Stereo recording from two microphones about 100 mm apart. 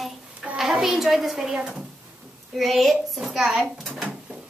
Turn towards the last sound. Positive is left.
turn(degrees=0)  # may be behind; listen again after turning